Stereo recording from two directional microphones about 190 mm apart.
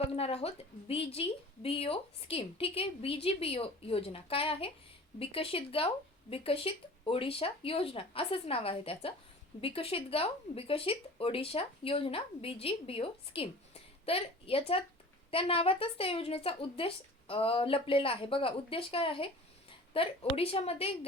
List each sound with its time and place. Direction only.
0.1 s a woman's voice: 30° left (ahead or behind)